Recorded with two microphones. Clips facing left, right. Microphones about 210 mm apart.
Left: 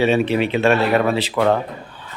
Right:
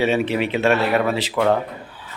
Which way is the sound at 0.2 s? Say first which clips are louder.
Left 3 dB; 25° left (ahead or behind).